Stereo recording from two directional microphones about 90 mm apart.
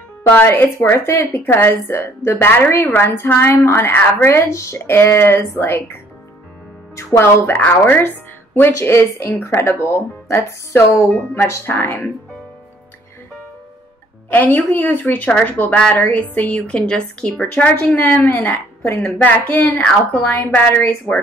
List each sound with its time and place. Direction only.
0.3 s speech: 25° left (ahead or behind)
7.0 s a woman's voice: 25° left (ahead or behind)
14.3 s a woman's voice: 20° left (ahead or behind)